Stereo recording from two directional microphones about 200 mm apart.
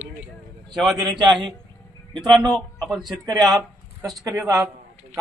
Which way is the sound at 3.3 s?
20° right (ahead or behind).